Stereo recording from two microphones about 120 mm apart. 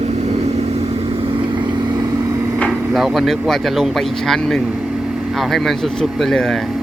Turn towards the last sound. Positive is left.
turn(degrees=5)  # may be behind; listen again after turning